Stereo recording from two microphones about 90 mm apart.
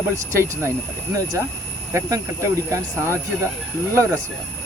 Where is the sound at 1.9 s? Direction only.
35° right (ahead or behind).